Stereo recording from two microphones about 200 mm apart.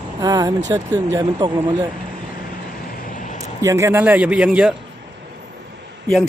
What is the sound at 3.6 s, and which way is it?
A man's voice, 15° right (ahead or behind).